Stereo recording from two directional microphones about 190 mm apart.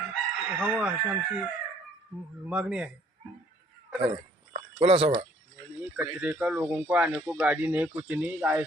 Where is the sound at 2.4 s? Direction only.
5° right (ahead or behind).